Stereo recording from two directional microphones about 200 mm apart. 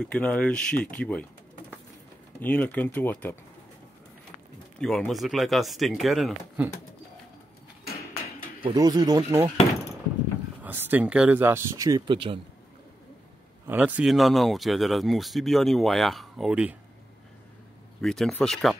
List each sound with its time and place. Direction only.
0.0 s speech: 5° left (ahead or behind)
2.4 s speech: 10° left (ahead or behind)
4.7 s speech: 5° left (ahead or behind)
8.6 s speech: 20° right (ahead or behind)
10.6 s speech: 10° right (ahead or behind); by 12.4 s 25° right (ahead or behind)
13.7 s speech: 5° right (ahead or behind)
18.0 s speech: centre (ahead or behind)